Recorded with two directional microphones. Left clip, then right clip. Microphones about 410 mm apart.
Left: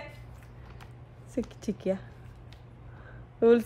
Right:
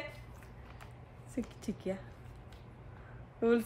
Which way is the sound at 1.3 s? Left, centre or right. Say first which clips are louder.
Left 7 dB; left.